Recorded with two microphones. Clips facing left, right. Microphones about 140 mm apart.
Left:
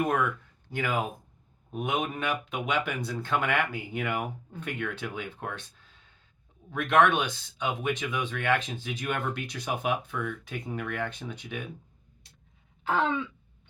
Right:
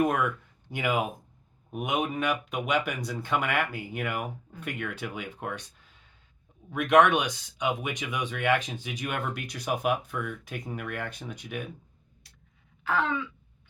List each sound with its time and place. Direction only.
0.7 s speech: 15° right (ahead or behind)
12.8 s throat clearing: 25° left (ahead or behind)